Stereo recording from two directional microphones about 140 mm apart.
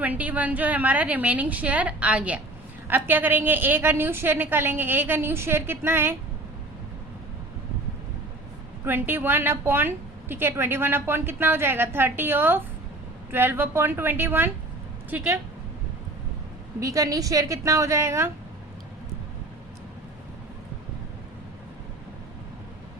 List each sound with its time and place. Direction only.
0.0 s a woman's voice: 10° right (ahead or behind)
8.8 s a woman's voice: 15° right (ahead or behind)
16.8 s a woman's voice: 25° right (ahead or behind)